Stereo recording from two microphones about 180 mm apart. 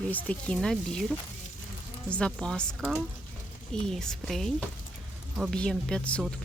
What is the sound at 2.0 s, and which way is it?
Speech, 5° left (ahead or behind).